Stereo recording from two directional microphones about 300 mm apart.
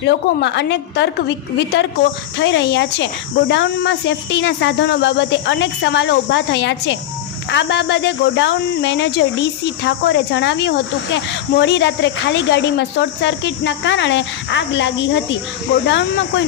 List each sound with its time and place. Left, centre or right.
0.0 s speech: left